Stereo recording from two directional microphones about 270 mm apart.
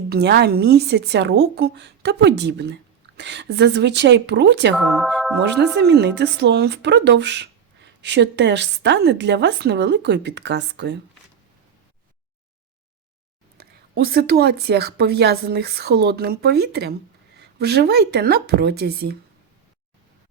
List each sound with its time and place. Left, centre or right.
0.1 s speech: right
4.8 s speech: centre
5.8 s speech: right
13.6 s speech: right